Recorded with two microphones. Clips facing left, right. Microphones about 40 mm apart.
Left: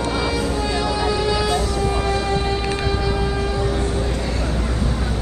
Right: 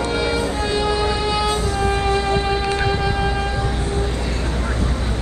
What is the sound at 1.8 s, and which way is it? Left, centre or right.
Music, right.